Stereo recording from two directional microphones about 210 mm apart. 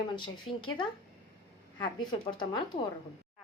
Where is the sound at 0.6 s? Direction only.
20° left (ahead or behind).